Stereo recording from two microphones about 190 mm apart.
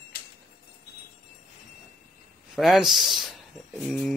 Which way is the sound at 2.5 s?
Centre (ahead or behind).